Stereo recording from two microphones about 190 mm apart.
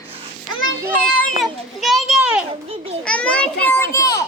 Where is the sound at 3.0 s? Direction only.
5° left (ahead or behind).